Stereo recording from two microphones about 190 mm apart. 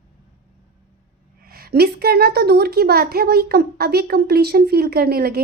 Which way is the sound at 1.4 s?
55° right (ahead or behind).